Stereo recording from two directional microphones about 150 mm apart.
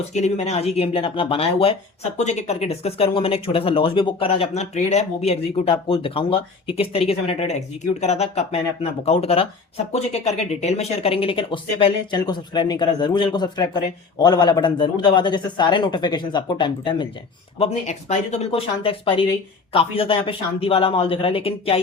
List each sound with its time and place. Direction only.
0.1 s speech: 50° left (ahead or behind)
2.1 s speech: 50° left (ahead or behind); by 17.1 s 30° left (ahead or behind)
17.6 s speech: 50° left (ahead or behind)